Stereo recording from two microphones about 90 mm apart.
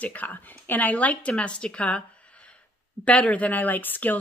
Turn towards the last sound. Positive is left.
turn(degrees=20)  # may be behind; listen again after turning